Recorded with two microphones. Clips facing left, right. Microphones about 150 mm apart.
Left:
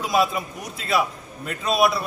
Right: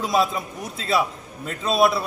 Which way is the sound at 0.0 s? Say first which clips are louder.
Even; centre (ahead or behind).